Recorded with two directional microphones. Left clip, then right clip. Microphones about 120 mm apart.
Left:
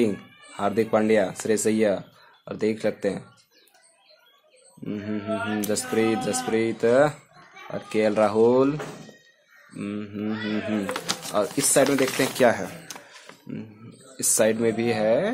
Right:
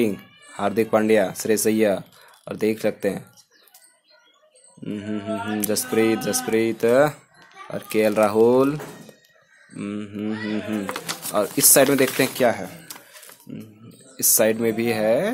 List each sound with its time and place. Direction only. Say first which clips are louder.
0.0 s speech: right 1 dB; 20° right (ahead or behind)
4.8 s speech: right 1 dB; 20° right (ahead or behind)
9.8 s speech: right 2 dB; 20° right (ahead or behind)
11.8 s speech: right 3 dB; 35° right (ahead or behind)
12.4 s speech: left 2 dB; 5° right (ahead or behind)
12.9 s a sound: left 1 dB; 20° left (ahead or behind)
14.1 s speech: right 2 dB; 20° right (ahead or behind)